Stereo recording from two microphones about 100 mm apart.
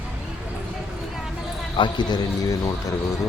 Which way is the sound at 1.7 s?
50° left (ahead or behind).